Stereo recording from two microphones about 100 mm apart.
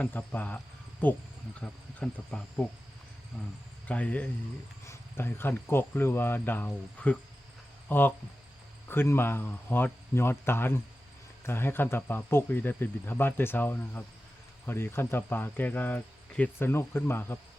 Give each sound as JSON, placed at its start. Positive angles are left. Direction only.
{"t": 0.0, "sound": "speech", "side_deg": 15}
{"t": 3.8, "sound": "speech", "side_deg": 15}